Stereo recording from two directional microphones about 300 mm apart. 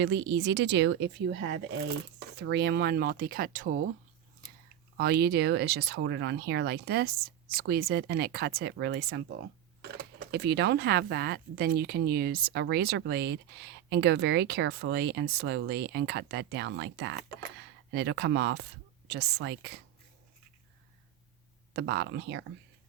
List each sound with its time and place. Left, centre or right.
0.0 s speech: right
4.9 s speech: right
21.7 s speech: right